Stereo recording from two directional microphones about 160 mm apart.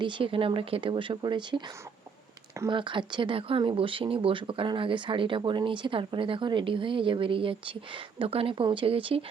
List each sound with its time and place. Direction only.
0.0 s speech: 30° right (ahead or behind)
2.6 s speech: 30° right (ahead or behind)